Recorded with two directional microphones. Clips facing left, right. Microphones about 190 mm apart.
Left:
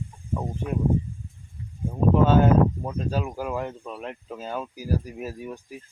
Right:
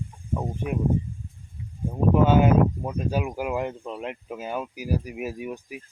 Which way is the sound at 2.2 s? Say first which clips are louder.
Even; 10° right (ahead or behind).